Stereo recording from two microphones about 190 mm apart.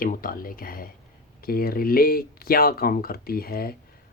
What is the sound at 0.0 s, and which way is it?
Speech, 50° left (ahead or behind).